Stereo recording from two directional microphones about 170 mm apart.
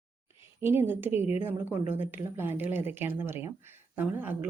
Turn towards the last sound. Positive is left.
turn(degrees=-10)  # may be behind; listen again after turning